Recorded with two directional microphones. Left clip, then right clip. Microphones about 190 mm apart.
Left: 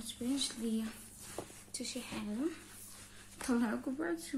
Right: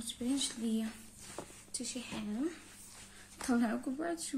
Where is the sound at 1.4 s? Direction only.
25° left (ahead or behind).